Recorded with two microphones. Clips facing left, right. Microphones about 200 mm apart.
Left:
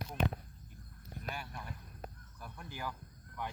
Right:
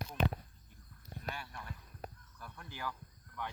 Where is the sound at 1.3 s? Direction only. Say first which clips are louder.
Left 2 dB; 10° left (ahead or behind).